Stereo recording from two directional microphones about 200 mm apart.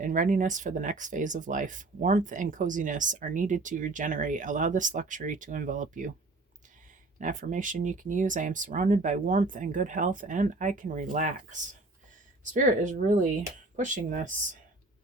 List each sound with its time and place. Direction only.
0.0 s speech: 40° right (ahead or behind)
7.2 s speech: 40° right (ahead or behind)